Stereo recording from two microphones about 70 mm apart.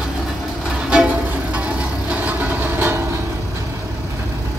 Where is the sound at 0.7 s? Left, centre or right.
Centre; by 3.2 s right.